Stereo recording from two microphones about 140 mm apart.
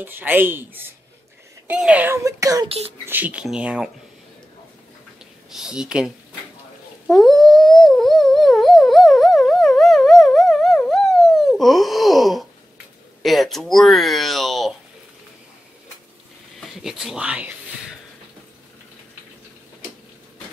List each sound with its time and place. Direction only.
0.0 s speech: 15° right (ahead or behind)
2.2 s speech: 25° right (ahead or behind)
3.1 s speech: 10° right (ahead or behind)
5.5 s speech: 5° right (ahead or behind)
7.1 s a sound: centre (ahead or behind)
13.2 s speech: centre (ahead or behind)
16.5 s a sound: 5° right (ahead or behind)